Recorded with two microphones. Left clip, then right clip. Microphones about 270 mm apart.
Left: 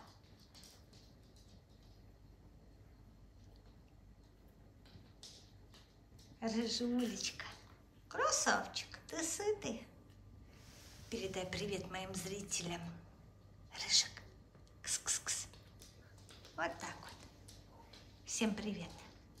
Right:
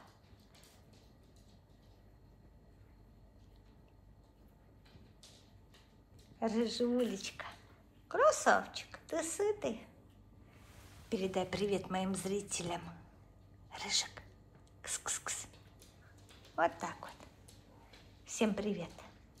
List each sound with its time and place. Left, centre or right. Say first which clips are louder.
6.4 s a woman's voice: right 5 dB; centre
11.1 s a woman's voice: right 6 dB; centre
16.5 s a woman's voice: right 7 dB; centre